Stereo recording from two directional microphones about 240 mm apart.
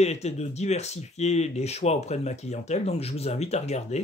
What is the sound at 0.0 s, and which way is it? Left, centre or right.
Speech, left.